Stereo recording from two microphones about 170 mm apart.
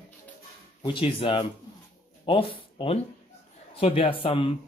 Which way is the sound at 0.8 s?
30° left (ahead or behind).